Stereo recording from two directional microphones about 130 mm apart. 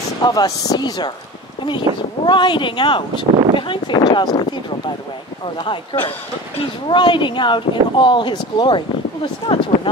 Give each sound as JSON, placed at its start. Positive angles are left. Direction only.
{"t": 0.2, "sound": "speech", "side_deg": 30}
{"t": 2.2, "sound": "speech", "side_deg": 35}